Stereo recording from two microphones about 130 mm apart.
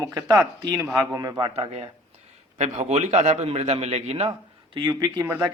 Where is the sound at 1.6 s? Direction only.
50° right (ahead or behind).